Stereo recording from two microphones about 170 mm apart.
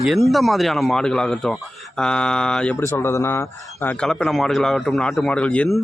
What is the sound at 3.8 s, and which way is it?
Speech, 5° left (ahead or behind).